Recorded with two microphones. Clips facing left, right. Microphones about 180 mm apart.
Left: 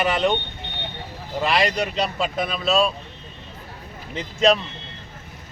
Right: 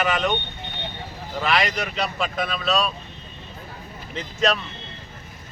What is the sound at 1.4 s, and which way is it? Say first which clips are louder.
Speech: left 2 dB; 30° left (ahead or behind).